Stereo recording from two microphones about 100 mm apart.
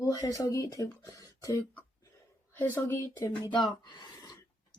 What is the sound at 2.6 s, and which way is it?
Speech, 25° left (ahead or behind).